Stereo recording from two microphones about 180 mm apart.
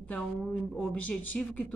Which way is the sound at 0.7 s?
5° left (ahead or behind).